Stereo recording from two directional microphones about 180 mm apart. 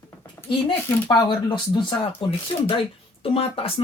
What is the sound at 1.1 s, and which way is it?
A woman's voice, 25° left (ahead or behind).